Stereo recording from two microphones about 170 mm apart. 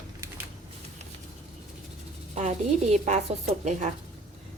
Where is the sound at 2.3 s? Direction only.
45° right (ahead or behind).